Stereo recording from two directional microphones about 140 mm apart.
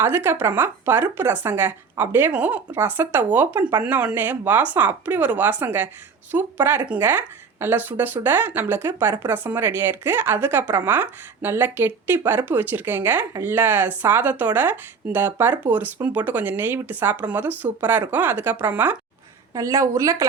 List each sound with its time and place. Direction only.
0.0 s speech: 15° right (ahead or behind)
19.5 s a woman's voice: 20° right (ahead or behind)